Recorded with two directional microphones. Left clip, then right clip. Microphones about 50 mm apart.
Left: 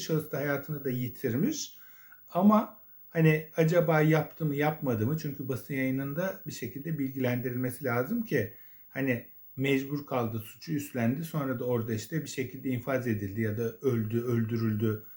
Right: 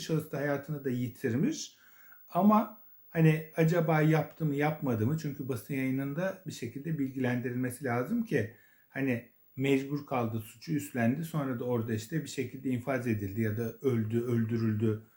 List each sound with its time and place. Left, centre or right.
0.0 s speech: left; by 13.7 s centre
13.8 s speech: left